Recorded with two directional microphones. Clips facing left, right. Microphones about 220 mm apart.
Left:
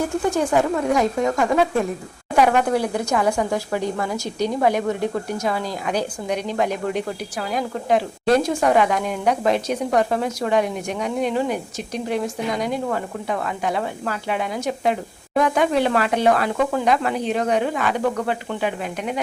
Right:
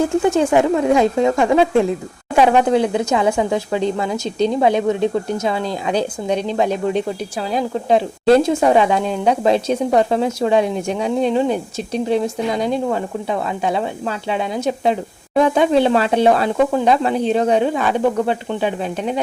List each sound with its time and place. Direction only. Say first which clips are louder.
0.2 s speech: right 3 dB; 25° right (ahead or behind)